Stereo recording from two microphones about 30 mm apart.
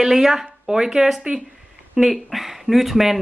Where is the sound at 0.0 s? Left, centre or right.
Centre.